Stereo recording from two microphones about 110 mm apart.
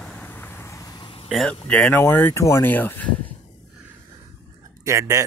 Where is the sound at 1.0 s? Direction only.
55° left (ahead or behind).